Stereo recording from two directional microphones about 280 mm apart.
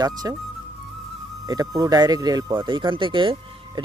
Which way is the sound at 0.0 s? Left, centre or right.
Centre.